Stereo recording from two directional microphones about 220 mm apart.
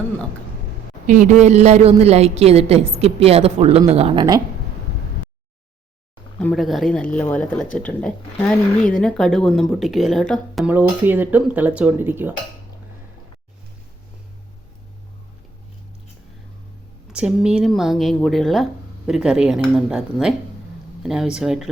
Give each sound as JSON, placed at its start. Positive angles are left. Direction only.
{"t": 1.0, "sound": "a woman's voice", "side_deg": -35}
{"t": 6.4, "sound": "speech", "side_deg": 0}
{"t": 17.1, "sound": "speech", "side_deg": -5}